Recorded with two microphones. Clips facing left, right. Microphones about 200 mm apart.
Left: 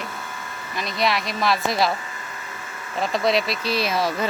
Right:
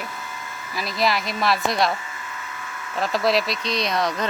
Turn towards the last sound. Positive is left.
turn(degrees=5)  # may be behind; listen again after turning